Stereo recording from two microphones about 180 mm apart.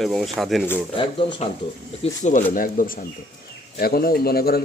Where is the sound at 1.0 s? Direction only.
30° left (ahead or behind).